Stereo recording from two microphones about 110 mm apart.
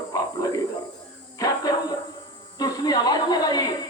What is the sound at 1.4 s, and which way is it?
Music, 35° left (ahead or behind).